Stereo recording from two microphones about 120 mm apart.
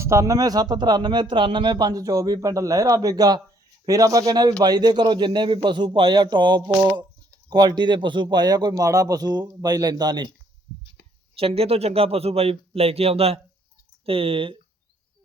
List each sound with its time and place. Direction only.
0.0 s a man's voice: 25° right (ahead or behind)
11.3 s speech: 55° right (ahead or behind)